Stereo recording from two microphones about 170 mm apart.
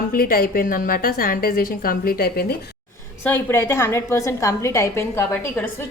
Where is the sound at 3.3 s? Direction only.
15° left (ahead or behind).